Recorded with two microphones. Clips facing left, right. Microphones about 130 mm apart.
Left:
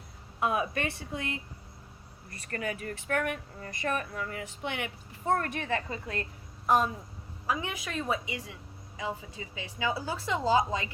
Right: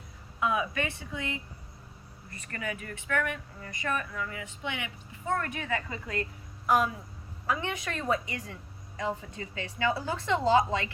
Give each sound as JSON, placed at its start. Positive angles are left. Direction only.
{"t": 0.3, "sound": "speech", "side_deg": 50}
{"t": 2.5, "sound": "speech", "side_deg": 45}
{"t": 7.4, "sound": "a woman's voice", "side_deg": 10}